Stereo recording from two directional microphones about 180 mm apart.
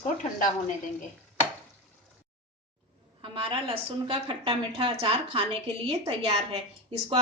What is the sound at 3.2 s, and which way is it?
A woman's voice, 30° right (ahead or behind).